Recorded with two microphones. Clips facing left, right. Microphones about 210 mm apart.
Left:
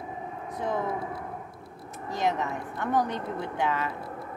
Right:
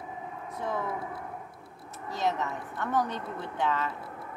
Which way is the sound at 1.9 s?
15° left (ahead or behind).